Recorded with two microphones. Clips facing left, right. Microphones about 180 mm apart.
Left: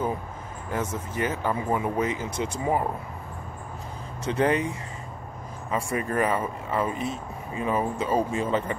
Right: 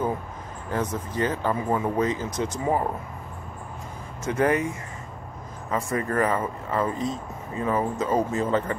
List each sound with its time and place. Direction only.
0.7 s speech: 10° left (ahead or behind)
2.2 s speech: 30° left (ahead or behind)
4.2 s speech: 25° left (ahead or behind)
5.7 s speech: 15° left (ahead or behind)